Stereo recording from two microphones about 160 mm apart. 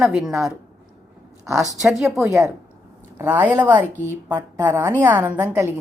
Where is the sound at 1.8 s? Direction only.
Centre (ahead or behind).